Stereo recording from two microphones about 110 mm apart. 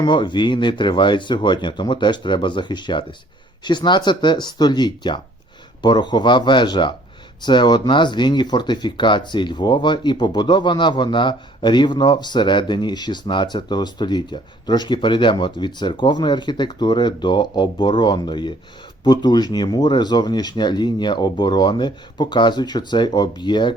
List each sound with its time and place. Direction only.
0.0 s speech: 45° left (ahead or behind)